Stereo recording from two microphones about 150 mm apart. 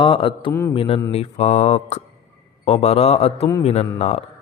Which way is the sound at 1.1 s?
45° left (ahead or behind).